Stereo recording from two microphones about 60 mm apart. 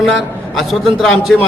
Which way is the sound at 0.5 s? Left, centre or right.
Centre.